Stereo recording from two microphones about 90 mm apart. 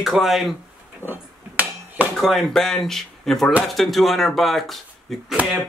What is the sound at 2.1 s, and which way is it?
Speech, centre (ahead or behind).